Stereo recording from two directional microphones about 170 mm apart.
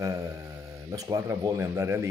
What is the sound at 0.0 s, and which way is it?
Speech, 20° right (ahead or behind).